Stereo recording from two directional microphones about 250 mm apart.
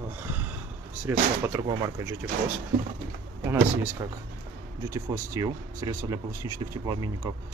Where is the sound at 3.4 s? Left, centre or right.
Centre.